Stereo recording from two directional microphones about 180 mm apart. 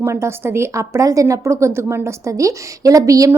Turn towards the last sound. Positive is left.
turn(degrees=-20)  # may be behind; listen again after turning